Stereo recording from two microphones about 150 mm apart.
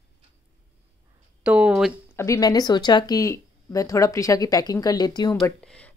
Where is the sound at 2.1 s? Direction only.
20° left (ahead or behind).